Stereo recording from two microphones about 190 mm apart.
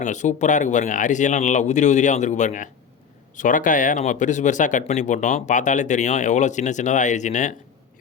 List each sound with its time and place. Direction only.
0.0 s speech: 40° left (ahead or behind)